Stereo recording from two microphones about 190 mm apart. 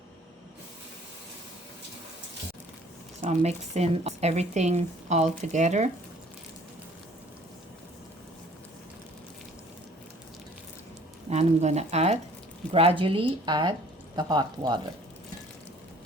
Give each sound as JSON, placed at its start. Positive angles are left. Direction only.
{"t": 3.2, "sound": "speech", "side_deg": -35}
{"t": 11.3, "sound": "speech", "side_deg": -35}